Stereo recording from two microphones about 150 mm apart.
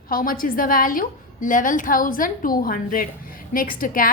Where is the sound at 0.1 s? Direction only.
70° left (ahead or behind).